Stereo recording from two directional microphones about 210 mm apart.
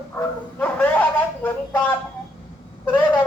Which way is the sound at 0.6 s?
5° left (ahead or behind).